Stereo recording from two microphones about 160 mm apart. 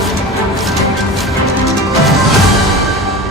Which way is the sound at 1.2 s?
Centre (ahead or behind).